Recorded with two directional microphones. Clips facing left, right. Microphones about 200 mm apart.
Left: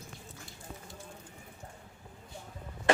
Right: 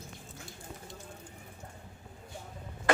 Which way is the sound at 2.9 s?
25° left (ahead or behind).